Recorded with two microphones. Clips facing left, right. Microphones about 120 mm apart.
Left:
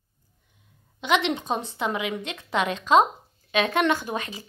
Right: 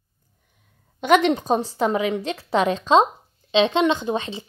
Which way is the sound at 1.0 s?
45° right (ahead or behind).